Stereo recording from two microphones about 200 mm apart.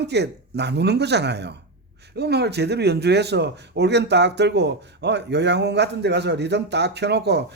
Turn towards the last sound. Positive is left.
turn(degrees=-55)  # may be behind; listen again after turning